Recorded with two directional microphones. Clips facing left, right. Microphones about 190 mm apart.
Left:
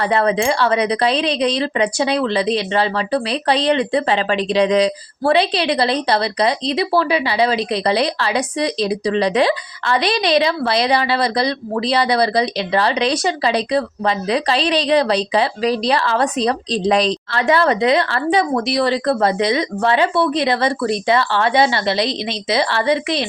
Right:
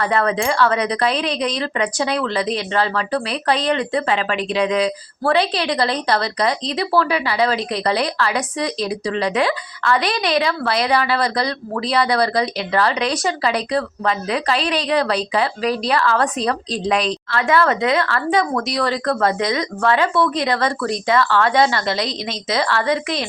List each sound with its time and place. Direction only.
0.0 s a woman's voice: 20° left (ahead or behind)
16.7 s a woman's voice: 35° left (ahead or behind)
17.4 s a woman's voice: 20° left (ahead or behind)
20.4 s a woman's voice: 15° left (ahead or behind)